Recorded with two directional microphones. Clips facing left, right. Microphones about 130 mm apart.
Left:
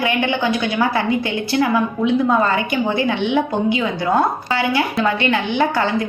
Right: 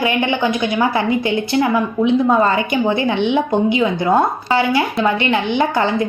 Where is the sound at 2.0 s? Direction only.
Centre (ahead or behind).